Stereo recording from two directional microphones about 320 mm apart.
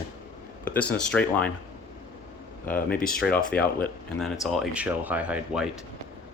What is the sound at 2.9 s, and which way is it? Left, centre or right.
Speech, left.